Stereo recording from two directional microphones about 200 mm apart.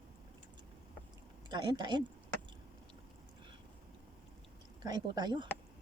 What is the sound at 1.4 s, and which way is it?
Speech, 20° right (ahead or behind).